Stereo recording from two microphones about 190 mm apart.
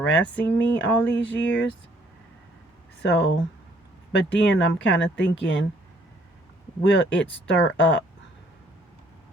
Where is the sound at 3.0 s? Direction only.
70° left (ahead or behind).